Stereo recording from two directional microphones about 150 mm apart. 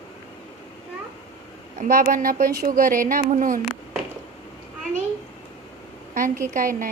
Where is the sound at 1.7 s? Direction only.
65° right (ahead or behind).